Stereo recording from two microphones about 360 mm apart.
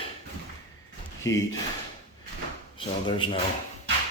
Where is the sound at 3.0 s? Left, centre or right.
Centre.